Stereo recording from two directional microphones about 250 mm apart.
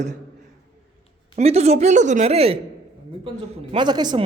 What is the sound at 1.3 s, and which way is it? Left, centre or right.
A woman's voice, right.